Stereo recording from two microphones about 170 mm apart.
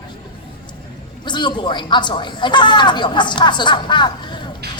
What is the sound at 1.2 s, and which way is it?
A man's voice, 25° left (ahead or behind).